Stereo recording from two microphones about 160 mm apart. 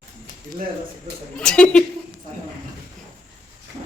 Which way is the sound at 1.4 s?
5° left (ahead or behind).